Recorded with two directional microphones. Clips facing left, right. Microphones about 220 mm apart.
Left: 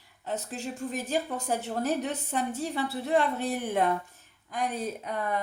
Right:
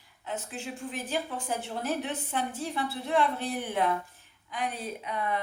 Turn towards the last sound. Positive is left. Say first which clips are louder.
# left 1 dB
turn(degrees=45)  # may be behind; listen again after turning